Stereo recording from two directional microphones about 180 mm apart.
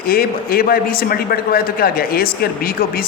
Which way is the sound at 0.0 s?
55° left (ahead or behind).